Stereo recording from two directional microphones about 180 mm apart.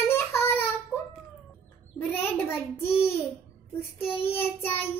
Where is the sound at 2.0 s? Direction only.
10° left (ahead or behind).